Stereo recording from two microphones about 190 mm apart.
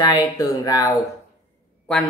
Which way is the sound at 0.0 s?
20° left (ahead or behind).